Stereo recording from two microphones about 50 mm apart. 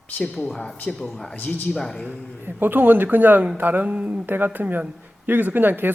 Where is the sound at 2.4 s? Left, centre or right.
Right.